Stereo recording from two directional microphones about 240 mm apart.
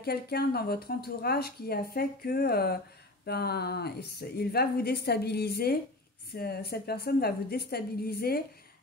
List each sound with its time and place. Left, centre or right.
0.0 s speech: left